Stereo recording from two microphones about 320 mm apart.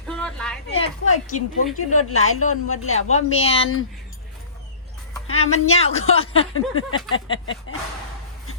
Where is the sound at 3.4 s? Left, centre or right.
Centre.